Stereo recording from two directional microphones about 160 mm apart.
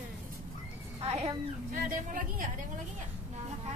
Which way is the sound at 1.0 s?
40° right (ahead or behind).